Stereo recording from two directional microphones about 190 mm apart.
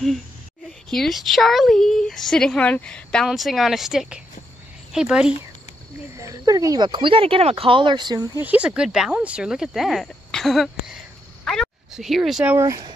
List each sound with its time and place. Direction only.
0.8 s speech: centre (ahead or behind)
6.1 s speech: 15° right (ahead or behind)
8.5 s speech: 5° right (ahead or behind)
11.4 s a sound: centre (ahead or behind)
12.5 s speech: 15° right (ahead or behind)